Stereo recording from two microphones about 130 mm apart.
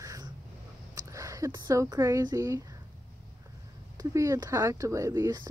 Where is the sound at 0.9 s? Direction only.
25° right (ahead or behind).